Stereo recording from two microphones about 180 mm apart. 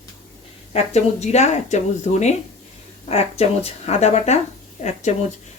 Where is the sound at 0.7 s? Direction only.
35° left (ahead or behind).